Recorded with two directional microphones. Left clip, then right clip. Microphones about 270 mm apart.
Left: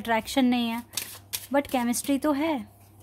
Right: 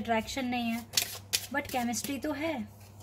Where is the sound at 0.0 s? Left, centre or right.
Left.